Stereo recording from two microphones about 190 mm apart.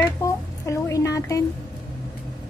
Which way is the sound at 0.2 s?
15° left (ahead or behind).